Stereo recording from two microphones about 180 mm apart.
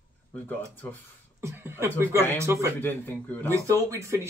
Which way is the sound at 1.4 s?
15° right (ahead or behind).